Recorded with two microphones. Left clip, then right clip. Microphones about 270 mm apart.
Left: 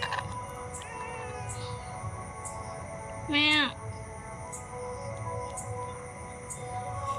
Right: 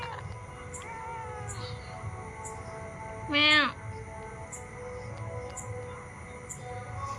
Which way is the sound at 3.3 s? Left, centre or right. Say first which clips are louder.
Right 2 dB; centre.